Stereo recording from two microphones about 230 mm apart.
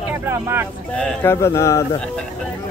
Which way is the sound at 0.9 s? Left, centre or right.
Centre.